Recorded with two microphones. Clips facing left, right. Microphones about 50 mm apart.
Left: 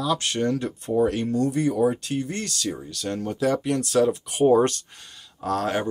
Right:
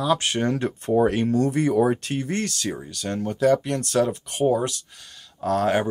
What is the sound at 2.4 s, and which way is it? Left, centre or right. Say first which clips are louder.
Speech: right 1 dB; right.